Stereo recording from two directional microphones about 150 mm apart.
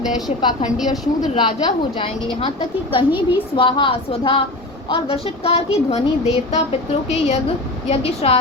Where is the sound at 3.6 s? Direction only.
35° left (ahead or behind).